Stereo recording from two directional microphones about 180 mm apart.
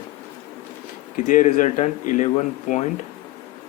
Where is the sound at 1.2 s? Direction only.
45° left (ahead or behind).